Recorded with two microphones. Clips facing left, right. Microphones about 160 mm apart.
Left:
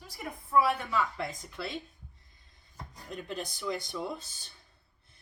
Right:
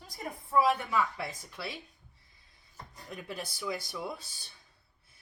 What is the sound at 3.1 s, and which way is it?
Speech, 10° right (ahead or behind).